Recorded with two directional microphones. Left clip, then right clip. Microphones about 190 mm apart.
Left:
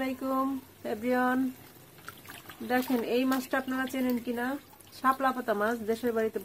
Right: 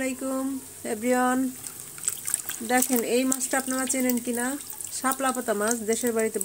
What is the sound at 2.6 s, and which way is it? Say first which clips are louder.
Speech: right 4 dB; 20° right (ahead or behind).